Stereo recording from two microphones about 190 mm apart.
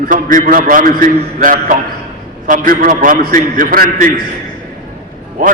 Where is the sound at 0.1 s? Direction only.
45° right (ahead or behind).